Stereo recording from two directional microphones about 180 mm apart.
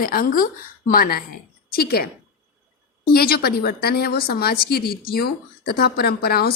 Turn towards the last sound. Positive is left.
turn(degrees=60)  # may be behind; listen again after turning